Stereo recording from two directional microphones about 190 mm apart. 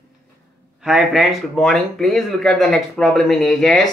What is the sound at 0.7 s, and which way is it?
Speech, centre (ahead or behind).